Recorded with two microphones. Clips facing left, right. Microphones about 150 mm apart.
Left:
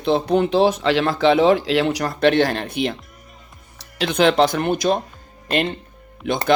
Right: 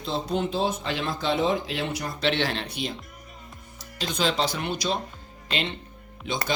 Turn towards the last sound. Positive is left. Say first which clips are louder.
# left 8 dB
turn(degrees=60)  # may be behind; listen again after turning